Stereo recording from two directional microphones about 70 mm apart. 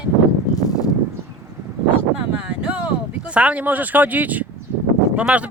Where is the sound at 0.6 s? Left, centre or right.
Left.